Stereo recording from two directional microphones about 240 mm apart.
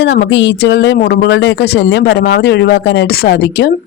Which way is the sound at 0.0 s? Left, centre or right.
Left.